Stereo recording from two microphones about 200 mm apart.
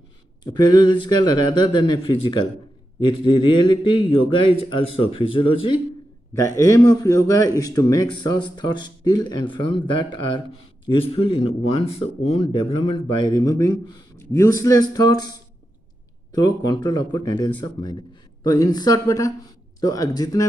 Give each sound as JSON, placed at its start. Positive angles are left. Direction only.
{"t": 0.4, "sound": "speech", "side_deg": 20}
{"t": 6.3, "sound": "a man's voice", "side_deg": 15}
{"t": 10.9, "sound": "a man's voice", "side_deg": 25}
{"t": 16.3, "sound": "a man's voice", "side_deg": 20}